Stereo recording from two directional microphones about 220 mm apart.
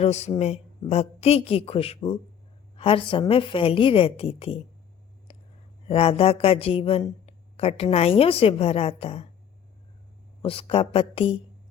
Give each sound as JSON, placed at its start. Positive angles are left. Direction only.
{"t": 0.0, "sound": "speech", "side_deg": 30}
{"t": 5.3, "sound": "a sound", "side_deg": 25}
{"t": 5.9, "sound": "speech", "side_deg": 25}
{"t": 10.4, "sound": "speech", "side_deg": 25}